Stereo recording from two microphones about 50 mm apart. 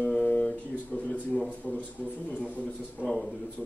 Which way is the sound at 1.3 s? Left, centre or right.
Centre.